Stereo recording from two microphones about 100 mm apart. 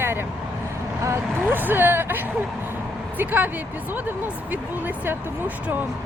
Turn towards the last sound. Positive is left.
turn(degrees=-20)  # may be behind; listen again after turning